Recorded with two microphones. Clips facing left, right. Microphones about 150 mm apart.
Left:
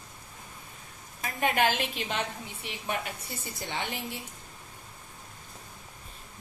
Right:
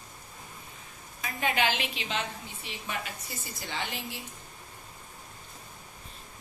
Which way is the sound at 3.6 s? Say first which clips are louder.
Left 2 dB; 20° left (ahead or behind).